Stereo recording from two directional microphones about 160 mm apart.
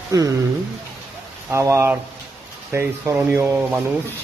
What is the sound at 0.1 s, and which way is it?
Speech, 20° right (ahead or behind).